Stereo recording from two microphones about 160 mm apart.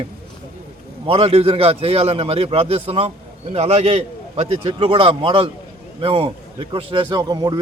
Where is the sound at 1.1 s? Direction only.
40° right (ahead or behind).